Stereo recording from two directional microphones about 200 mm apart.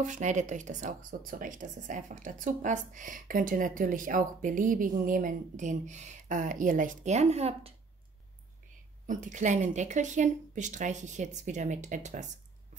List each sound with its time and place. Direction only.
0.0 s speech: 40° right (ahead or behind)
9.0 s speech: 40° right (ahead or behind)